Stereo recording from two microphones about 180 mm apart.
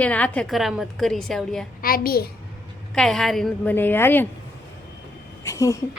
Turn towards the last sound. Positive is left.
turn(degrees=15)  # may be behind; listen again after turning